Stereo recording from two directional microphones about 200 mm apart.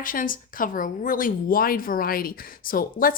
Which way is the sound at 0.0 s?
45° left (ahead or behind).